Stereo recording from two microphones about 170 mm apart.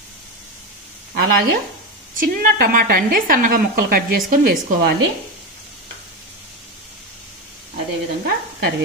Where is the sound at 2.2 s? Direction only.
55° right (ahead or behind).